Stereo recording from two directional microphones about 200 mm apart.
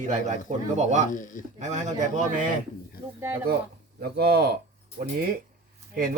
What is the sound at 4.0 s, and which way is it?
Speech, 55° right (ahead or behind).